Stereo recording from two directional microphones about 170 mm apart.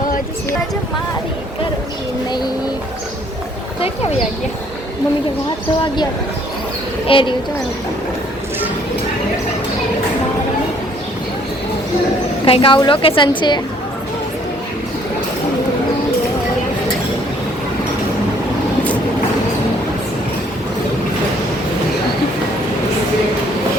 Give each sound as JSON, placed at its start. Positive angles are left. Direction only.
{"t": 7.1, "sound": "a woman's voice", "side_deg": 30}
{"t": 12.5, "sound": "a woman's voice", "side_deg": 35}